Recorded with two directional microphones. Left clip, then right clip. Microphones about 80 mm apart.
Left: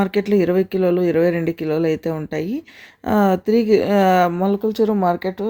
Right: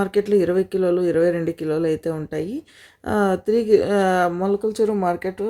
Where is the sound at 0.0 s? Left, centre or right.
Left.